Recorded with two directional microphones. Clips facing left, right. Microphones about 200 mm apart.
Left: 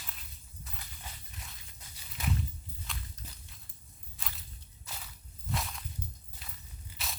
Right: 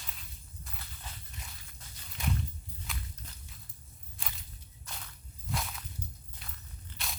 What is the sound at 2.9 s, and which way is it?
Walk, centre (ahead or behind).